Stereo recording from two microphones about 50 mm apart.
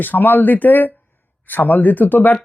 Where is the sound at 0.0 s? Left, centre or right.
Left.